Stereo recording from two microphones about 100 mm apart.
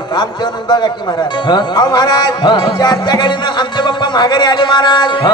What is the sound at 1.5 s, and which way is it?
A man's voice, 45° left (ahead or behind).